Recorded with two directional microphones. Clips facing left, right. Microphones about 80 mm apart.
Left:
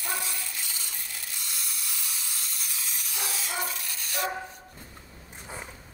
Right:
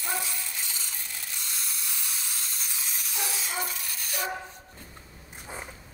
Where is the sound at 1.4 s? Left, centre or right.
Right.